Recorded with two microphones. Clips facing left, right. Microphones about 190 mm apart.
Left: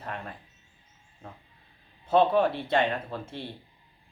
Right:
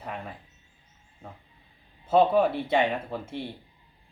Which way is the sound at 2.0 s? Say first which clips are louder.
Right 1 dB; 5° right (ahead or behind).